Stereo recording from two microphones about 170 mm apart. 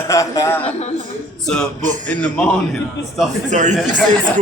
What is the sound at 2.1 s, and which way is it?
Speech, 5° left (ahead or behind).